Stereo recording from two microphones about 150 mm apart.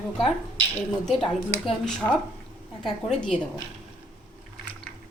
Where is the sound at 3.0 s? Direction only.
5° left (ahead or behind).